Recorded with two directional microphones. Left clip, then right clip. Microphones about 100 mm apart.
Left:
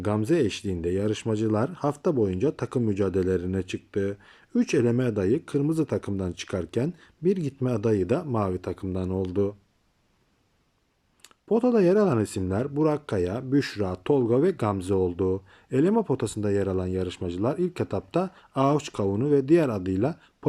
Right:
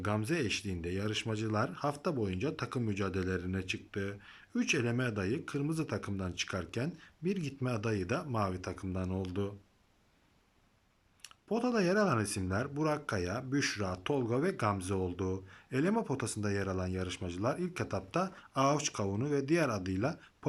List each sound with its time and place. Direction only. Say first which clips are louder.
0.0 s speech: left 10 dB; 50° left (ahead or behind)
11.2 s speech: left 11 dB; 50° left (ahead or behind)